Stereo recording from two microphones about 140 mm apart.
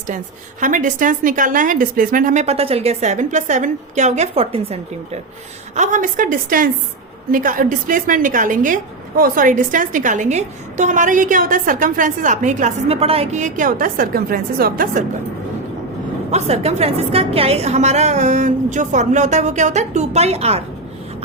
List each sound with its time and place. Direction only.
0.6 s a woman's voice: 65° right (ahead or behind); by 5.2 s 45° right (ahead or behind)
5.7 s a woman's voice: 60° right (ahead or behind)
12.9 s a woman's voice: 45° right (ahead or behind); by 15.0 s 90° right
16.3 s a woman's voice: 50° right (ahead or behind)